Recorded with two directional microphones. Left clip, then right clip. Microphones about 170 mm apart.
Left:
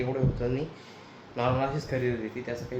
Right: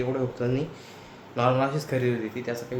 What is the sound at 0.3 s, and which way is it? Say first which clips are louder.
Speech: right 3 dB; 20° right (ahead or behind).